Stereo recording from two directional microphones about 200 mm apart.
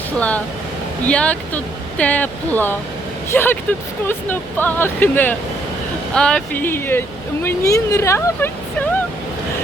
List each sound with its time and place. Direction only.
0.2 s speech: 5° left (ahead or behind)